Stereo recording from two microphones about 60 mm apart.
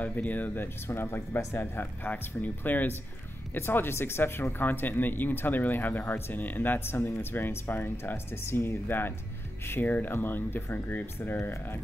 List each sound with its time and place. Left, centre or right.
0.0 s speech: left
0.8 s speech: left